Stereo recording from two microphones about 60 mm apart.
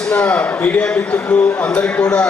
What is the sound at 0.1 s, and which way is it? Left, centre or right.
A man's voice, left.